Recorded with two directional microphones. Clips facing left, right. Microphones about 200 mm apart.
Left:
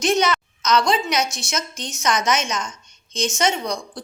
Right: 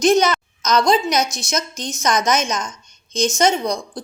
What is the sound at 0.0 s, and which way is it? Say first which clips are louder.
A woman's voice: right 4 dB; 40° right (ahead or behind).